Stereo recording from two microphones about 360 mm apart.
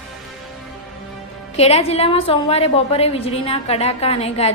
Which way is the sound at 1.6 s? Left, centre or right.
Centre.